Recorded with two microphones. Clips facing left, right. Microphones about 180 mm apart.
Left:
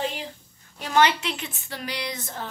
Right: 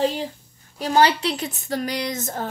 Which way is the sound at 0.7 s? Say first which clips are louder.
Right 3 dB; 35° right (ahead or behind).